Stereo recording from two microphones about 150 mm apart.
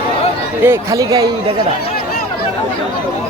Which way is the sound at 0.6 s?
20° right (ahead or behind).